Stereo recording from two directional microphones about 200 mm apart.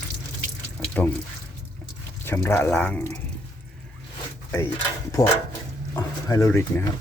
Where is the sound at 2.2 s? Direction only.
10° left (ahead or behind).